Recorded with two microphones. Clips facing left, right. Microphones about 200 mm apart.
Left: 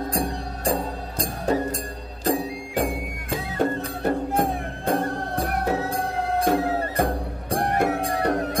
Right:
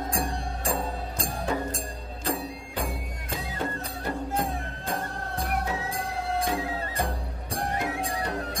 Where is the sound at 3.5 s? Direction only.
50° left (ahead or behind).